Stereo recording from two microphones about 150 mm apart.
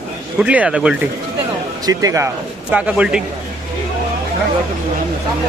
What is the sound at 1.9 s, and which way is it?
Speech, 25° right (ahead or behind).